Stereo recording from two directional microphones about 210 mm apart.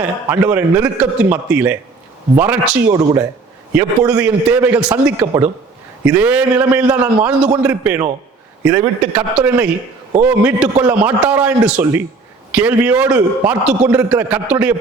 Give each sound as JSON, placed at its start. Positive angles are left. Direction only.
{"t": 0.0, "sound": "a man's voice", "side_deg": -5}
{"t": 2.8, "sound": "a man's voice", "side_deg": -15}